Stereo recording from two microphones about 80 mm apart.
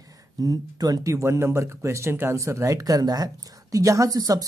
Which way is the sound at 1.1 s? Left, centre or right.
Right.